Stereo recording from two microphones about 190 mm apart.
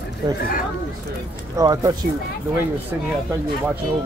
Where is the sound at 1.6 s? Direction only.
20° right (ahead or behind).